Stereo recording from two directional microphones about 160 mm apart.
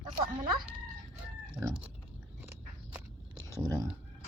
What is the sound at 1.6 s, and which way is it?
Cat, 5° right (ahead or behind).